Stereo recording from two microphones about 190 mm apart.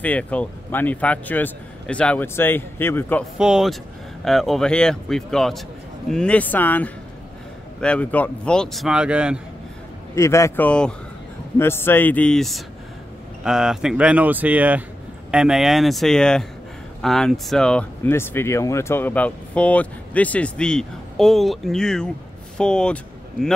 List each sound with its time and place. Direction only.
0.0 s speech: 5° left (ahead or behind)
3.3 s a man's voice: 5° right (ahead or behind)
10.1 s a man's voice: 15° left (ahead or behind)